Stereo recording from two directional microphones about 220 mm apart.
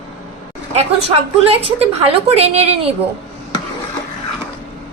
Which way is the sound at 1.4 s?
25° right (ahead or behind).